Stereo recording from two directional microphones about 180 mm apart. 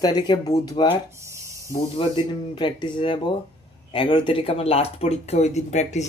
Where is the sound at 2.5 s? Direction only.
25° left (ahead or behind).